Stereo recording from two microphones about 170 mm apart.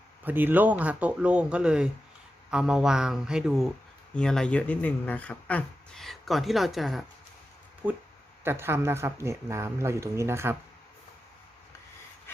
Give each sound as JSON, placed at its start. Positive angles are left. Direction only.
{"t": 0.3, "sound": "speech", "side_deg": -10}